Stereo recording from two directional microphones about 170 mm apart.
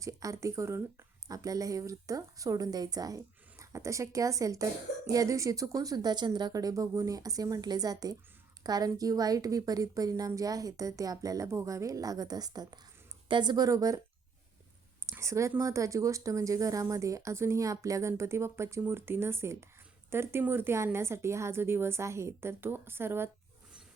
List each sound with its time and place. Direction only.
0.0 s a woman's voice: 20° right (ahead or behind)
15.0 s speech: 15° right (ahead or behind)